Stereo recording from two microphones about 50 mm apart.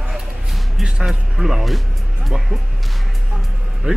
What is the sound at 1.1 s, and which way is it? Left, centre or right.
Single-lens reflex camera, centre.